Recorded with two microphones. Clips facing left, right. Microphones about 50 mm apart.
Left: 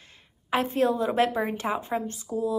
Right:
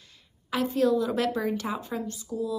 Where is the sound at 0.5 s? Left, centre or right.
Left.